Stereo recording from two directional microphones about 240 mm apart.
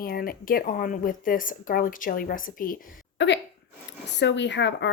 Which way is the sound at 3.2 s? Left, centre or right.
Left.